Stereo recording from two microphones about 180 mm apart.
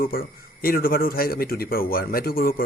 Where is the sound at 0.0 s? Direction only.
55° left (ahead or behind).